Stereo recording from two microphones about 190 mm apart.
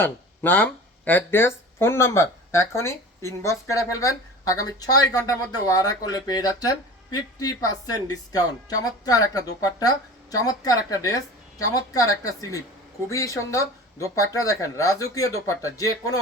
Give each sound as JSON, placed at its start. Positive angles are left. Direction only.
{"t": 0.0, "sound": "speech", "side_deg": 10}